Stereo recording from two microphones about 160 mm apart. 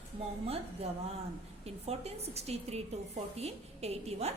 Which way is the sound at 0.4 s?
40° right (ahead or behind).